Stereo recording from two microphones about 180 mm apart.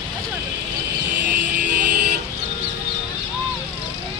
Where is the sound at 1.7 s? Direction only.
50° right (ahead or behind).